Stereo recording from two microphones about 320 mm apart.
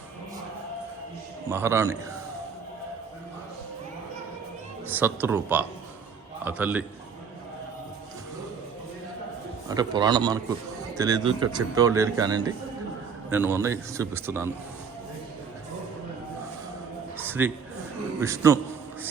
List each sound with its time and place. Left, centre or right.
1.5 s speech: centre
4.9 s speech: centre
9.6 s speech: centre
17.2 s a sound: centre
18.2 s speech: centre